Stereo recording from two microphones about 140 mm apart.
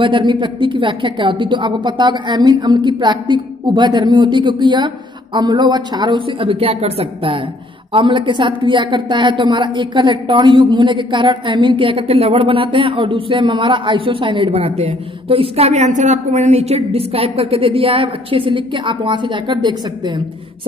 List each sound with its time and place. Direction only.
0.0 s a woman's voice: 35° right (ahead or behind)